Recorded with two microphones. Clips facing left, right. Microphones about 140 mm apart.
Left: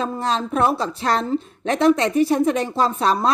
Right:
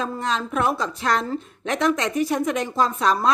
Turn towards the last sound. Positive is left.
turn(degrees=30)  # may be behind; listen again after turning